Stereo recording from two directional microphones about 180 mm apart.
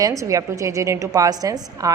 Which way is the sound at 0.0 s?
20° right (ahead or behind).